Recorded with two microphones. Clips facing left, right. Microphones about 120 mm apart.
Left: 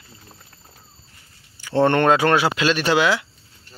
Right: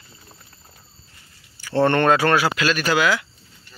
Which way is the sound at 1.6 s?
15° left (ahead or behind).